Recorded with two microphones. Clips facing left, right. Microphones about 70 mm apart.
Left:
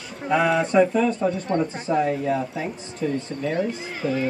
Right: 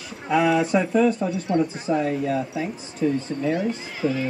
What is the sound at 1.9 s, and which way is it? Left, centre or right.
Speech, centre.